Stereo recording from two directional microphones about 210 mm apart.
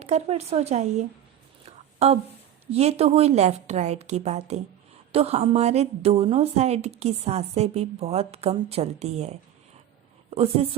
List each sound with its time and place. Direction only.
0.0 s a woman's voice: 30° right (ahead or behind)
1.6 s a sound: 30° right (ahead or behind)
2.7 s a woman's voice: 30° right (ahead or behind)